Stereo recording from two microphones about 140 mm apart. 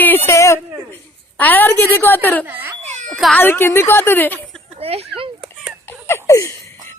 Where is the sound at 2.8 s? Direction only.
55° right (ahead or behind).